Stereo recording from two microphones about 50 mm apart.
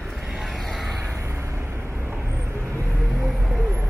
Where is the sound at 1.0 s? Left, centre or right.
Right.